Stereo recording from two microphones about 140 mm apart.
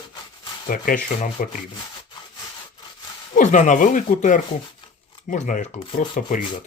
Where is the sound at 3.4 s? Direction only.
60° left (ahead or behind).